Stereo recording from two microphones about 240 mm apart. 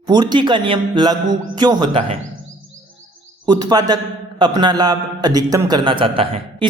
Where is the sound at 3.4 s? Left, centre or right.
Centre.